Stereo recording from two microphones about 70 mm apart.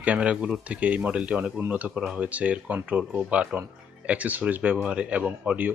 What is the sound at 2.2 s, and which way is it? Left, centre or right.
Speech, right.